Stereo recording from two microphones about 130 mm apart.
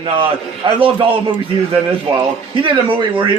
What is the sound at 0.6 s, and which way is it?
A man's voice, 40° right (ahead or behind).